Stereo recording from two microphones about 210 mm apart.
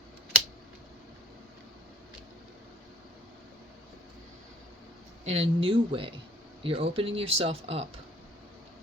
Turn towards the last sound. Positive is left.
turn(degrees=-30)  # may be behind; listen again after turning